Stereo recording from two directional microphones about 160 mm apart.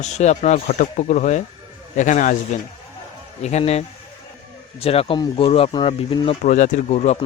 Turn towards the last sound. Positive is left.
turn(degrees=45)  # may be behind; listen again after turning